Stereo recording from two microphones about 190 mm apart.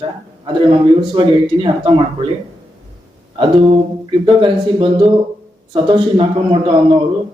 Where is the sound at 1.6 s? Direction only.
25° right (ahead or behind).